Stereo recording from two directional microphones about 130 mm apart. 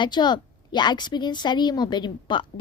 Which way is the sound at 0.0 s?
35° left (ahead or behind).